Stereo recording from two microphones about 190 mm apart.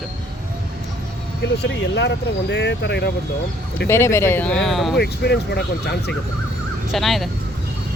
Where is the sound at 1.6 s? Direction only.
65° left (ahead or behind).